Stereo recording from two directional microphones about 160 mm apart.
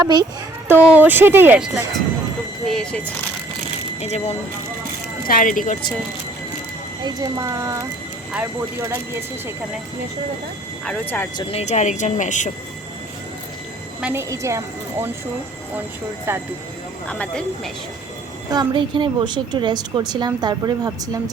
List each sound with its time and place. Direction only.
0.0 s a woman's voice: 25° right (ahead or behind)
0.7 s a woman's voice: 10° right (ahead or behind); by 3.1 s 5° left (ahead or behind)
4.0 s speech: 40° left (ahead or behind)
5.3 s speech: 55° left (ahead or behind)
7.0 s a woman's voice: 20° right (ahead or behind)
10.8 s speech: 10° left (ahead or behind)
11.3 s speech: 40° left (ahead or behind)
14.0 s a woman's voice: 15° right (ahead or behind)
17.1 s speech: 5° left (ahead or behind)
18.5 s a woman's voice: 30° right (ahead or behind)